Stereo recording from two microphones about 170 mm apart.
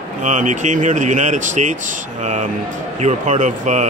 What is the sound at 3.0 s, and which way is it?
Speech, 45° right (ahead or behind).